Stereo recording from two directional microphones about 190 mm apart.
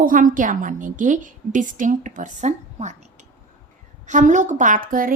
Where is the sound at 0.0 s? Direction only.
45° right (ahead or behind).